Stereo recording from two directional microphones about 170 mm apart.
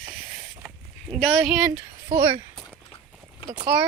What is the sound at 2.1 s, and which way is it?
Speech, 35° right (ahead or behind).